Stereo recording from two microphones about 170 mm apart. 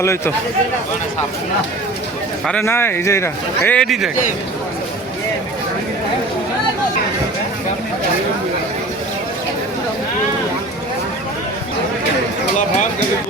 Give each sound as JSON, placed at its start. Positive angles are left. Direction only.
{"t": 0.0, "sound": "speech", "side_deg": 15}
{"t": 2.5, "sound": "speech", "side_deg": 15}
{"t": 3.7, "sound": "a man's voice", "side_deg": 5}